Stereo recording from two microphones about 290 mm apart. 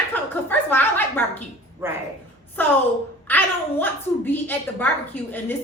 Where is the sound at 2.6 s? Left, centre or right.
Centre.